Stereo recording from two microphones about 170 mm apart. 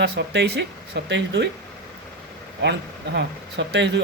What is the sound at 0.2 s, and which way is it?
Speech, 85° right.